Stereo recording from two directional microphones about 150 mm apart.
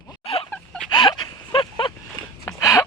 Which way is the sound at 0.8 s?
30° left (ahead or behind).